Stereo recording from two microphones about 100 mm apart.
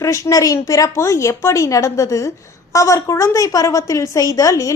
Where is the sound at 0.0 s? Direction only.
35° left (ahead or behind).